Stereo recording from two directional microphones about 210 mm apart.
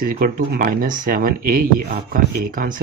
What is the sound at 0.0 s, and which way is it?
Speech, 45° right (ahead or behind).